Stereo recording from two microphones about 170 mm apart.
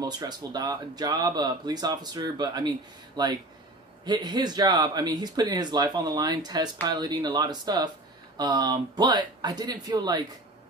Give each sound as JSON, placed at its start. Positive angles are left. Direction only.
{"t": 0.0, "sound": "speech", "side_deg": -25}